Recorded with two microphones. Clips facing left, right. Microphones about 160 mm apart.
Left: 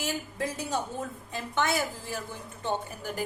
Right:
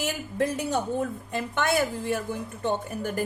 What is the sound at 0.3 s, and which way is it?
A woman's voice, 60° right (ahead or behind).